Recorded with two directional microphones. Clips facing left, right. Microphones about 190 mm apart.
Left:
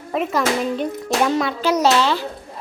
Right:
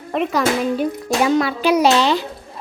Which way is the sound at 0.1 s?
Centre (ahead or behind).